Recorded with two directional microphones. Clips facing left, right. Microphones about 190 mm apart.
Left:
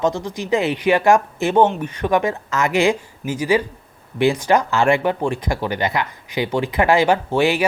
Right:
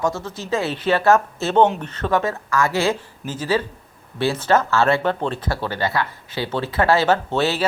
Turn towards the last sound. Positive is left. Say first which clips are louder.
# left 3 dB
turn(degrees=15)  # may be behind; listen again after turning